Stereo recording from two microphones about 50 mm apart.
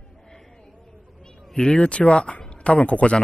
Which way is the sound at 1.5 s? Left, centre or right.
Left.